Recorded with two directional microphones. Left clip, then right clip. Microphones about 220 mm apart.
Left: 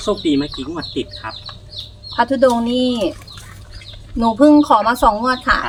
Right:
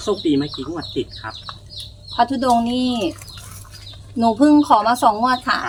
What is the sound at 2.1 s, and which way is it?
Speech, 5° left (ahead or behind).